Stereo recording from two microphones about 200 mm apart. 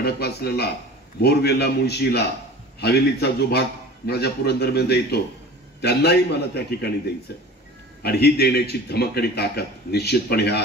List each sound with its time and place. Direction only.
0.0 s a man's voice: 55° left (ahead or behind)
8.0 s a man's voice: 55° left (ahead or behind)